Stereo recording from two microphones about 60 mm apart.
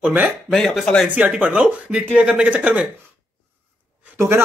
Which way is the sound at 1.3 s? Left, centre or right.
Centre.